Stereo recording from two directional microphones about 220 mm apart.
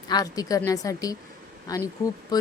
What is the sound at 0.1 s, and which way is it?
Speech, 15° left (ahead or behind).